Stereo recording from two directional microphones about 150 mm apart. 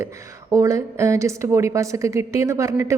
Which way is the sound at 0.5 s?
20° right (ahead or behind).